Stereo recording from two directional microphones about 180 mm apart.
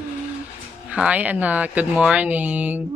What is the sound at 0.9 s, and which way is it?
Speech, 5° right (ahead or behind).